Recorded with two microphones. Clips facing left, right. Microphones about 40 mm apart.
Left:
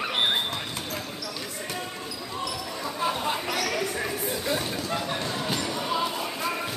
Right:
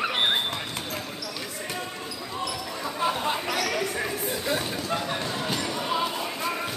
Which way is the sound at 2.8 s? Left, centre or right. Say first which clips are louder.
Right 1 dB; centre.